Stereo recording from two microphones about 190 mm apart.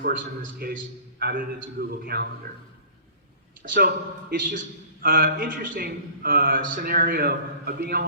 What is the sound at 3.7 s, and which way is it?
A man's voice, 45° right (ahead or behind).